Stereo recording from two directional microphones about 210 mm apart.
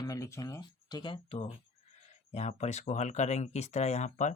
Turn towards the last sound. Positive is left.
turn(degrees=35)  # may be behind; listen again after turning